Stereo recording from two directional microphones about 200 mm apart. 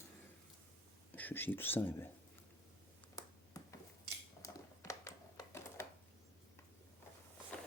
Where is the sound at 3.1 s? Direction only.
15° left (ahead or behind).